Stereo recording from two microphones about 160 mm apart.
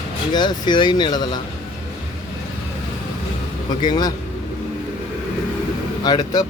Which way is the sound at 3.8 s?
25° left (ahead or behind).